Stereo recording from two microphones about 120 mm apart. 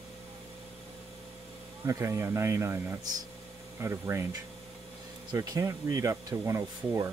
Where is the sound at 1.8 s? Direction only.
25° right (ahead or behind).